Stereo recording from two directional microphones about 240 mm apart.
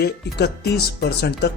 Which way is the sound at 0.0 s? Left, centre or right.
Left.